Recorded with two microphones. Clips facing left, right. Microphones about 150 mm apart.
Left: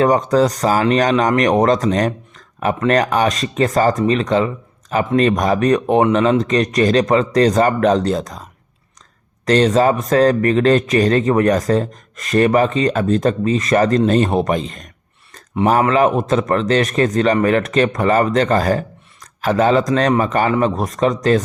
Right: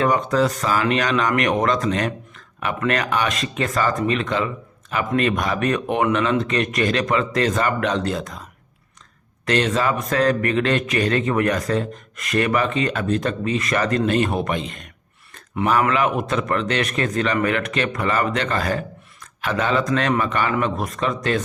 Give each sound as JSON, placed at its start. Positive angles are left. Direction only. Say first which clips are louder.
{"t": 0.0, "sound": "speech", "louder": "left 5 dB", "side_deg": 40}
{"t": 9.5, "sound": "speech", "louder": "left 7 dB", "side_deg": 35}